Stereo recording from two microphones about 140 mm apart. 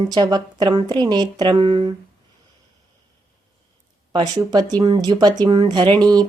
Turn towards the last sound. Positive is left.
turn(degrees=-30)  # may be behind; listen again after turning